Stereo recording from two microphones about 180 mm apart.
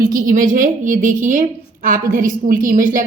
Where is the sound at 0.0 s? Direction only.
50° right (ahead or behind).